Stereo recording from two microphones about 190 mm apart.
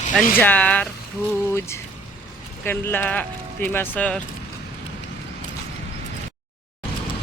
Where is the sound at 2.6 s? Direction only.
10° left (ahead or behind).